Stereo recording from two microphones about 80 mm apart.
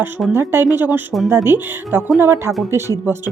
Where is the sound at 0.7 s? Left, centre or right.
Right.